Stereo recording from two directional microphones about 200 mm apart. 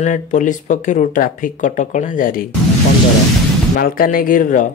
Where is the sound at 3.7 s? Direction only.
45° left (ahead or behind).